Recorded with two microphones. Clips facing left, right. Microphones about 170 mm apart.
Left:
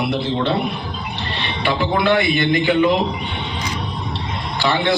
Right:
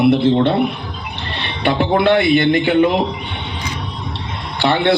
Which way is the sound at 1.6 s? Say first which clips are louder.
Right 4 dB; 55° right (ahead or behind).